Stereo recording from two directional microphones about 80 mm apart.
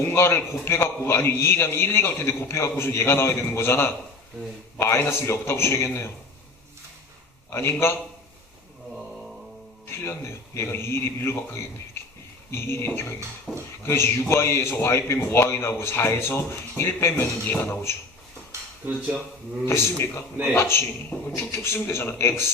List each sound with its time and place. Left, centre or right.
0.1 s a man's voice: left
7.5 s a man's voice: left
9.8 s a man's voice: left
13.5 s speech: centre
13.8 s a man's voice: left
19.6 s a man's voice: left